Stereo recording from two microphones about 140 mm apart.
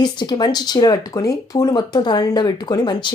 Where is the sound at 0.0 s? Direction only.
30° left (ahead or behind).